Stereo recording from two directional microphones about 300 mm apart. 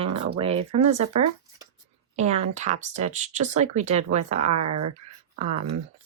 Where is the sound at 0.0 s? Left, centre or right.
Centre.